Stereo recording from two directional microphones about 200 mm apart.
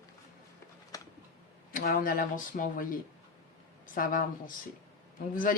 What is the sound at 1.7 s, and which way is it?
Speech, 45° left (ahead or behind).